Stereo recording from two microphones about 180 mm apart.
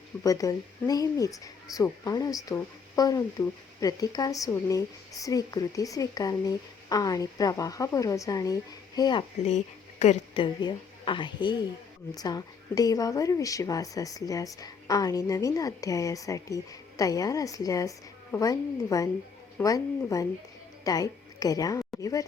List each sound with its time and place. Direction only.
0.2 s speech: 20° left (ahead or behind)
10.0 s a woman's voice: 35° left (ahead or behind)